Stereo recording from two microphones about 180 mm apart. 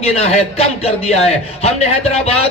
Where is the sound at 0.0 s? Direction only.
35° left (ahead or behind).